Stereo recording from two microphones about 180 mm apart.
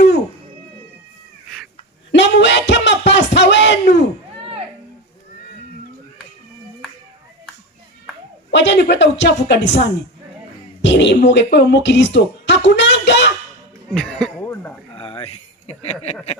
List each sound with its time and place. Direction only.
2.1 s music: 80° left
4.4 s chop: 35° right (ahead or behind)
8.4 s a woman's voice: 80° left
10.8 s speech: 75° left (ahead or behind)
13.9 s speech: 5° left (ahead or behind)
14.4 s a sound: 15° left (ahead or behind)
14.9 s a sound: 30° left (ahead or behind)